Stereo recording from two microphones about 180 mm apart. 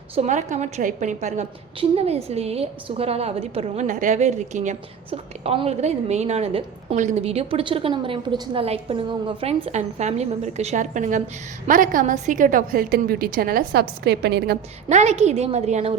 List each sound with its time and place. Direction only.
0.2 s a woman's voice: 40° right (ahead or behind); by 14.6 s 60° right (ahead or behind)
14.8 s a woman's voice: 40° right (ahead or behind)